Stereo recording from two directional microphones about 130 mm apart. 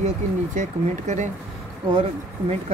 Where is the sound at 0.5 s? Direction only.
70° right (ahead or behind).